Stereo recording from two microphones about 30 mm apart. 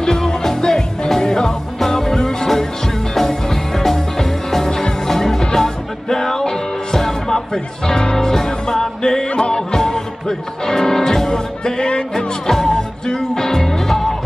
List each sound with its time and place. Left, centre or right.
0.0 s music: left
8.0 s music: left
8.5 s music: centre
11.6 s music: left; by 14.1 s centre